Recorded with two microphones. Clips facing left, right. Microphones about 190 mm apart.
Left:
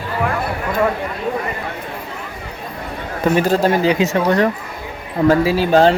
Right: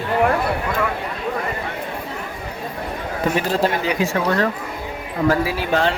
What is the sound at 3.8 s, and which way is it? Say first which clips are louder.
Speech: left 5 dB; 25° left (ahead or behind).